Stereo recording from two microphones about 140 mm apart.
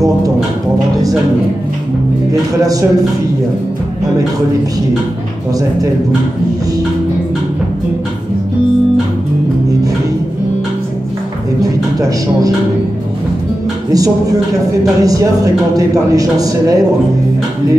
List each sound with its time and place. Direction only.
2.6 s speech: 25° right (ahead or behind)
13.9 s speech: 25° right (ahead or behind)